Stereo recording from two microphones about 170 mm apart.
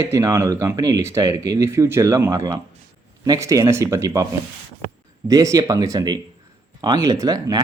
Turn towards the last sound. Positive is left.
turn(degrees=-20)  # may be behind; listen again after turning